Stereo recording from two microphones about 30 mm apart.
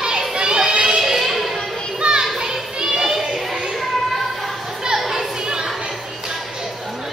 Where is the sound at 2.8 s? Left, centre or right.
Right.